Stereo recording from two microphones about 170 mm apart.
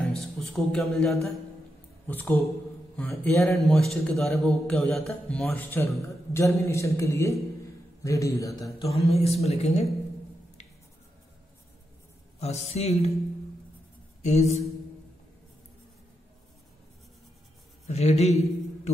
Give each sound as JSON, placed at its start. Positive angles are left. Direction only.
{"t": 0.0, "sound": "music", "side_deg": 0}
{"t": 2.0, "sound": "a man's voice", "side_deg": 10}
{"t": 8.7, "sound": "speech", "side_deg": 35}
{"t": 12.4, "sound": "speech", "side_deg": 40}
{"t": 14.2, "sound": "speech", "side_deg": 40}
{"t": 17.8, "sound": "speech", "side_deg": 40}